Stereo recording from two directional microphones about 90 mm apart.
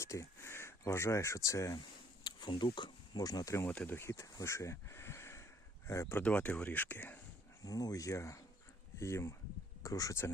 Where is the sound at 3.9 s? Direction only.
30° left (ahead or behind).